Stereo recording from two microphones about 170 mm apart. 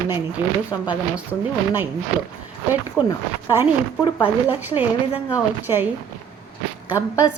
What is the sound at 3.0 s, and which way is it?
Speech, 10° right (ahead or behind).